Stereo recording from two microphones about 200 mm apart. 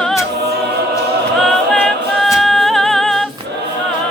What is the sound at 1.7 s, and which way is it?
A capella, centre (ahead or behind).